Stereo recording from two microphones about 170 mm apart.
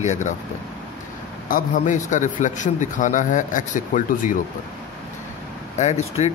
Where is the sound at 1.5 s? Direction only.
50° left (ahead or behind).